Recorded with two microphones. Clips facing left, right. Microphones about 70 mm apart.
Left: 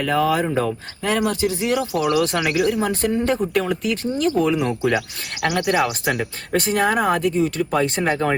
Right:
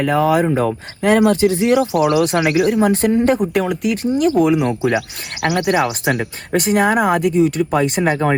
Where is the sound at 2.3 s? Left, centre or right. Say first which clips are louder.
Right 5 dB; right.